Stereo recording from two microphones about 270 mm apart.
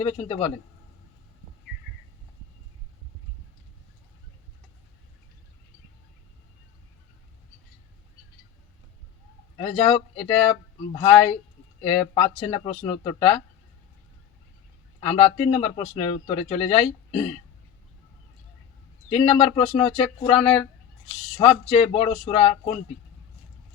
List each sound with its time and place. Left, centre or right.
0.0 s speech: left
9.6 s speech: left
15.0 s speech: left
19.1 s speech: left